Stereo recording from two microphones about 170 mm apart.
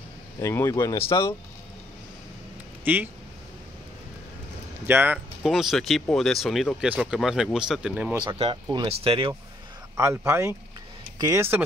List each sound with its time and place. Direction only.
0.4 s speech: 15° left (ahead or behind)
2.8 s speech: 10° right (ahead or behind)
4.8 s speech: 10° right (ahead or behind)
5.4 s speech: centre (ahead or behind)
8.3 s speech: 30° right (ahead or behind)
9.9 s speech: 15° right (ahead or behind)